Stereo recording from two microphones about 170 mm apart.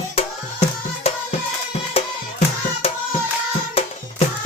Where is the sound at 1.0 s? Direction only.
35° left (ahead or behind).